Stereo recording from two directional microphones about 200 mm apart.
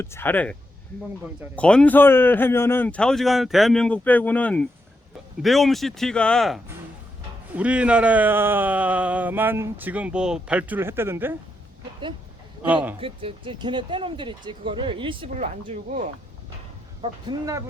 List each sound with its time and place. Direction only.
0.0 s a man's voice: 10° left (ahead or behind)
1.5 s a man's voice: 5° left (ahead or behind); by 11.3 s 10° right (ahead or behind)
12.6 s speech: 10° right (ahead or behind)
13.0 s speech: 25° right (ahead or behind)
17.0 s speech: 20° right (ahead or behind)